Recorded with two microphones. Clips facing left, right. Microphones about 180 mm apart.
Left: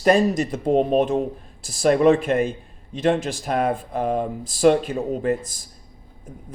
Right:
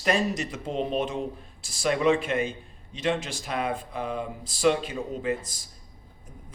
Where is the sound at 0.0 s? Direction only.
35° left (ahead or behind).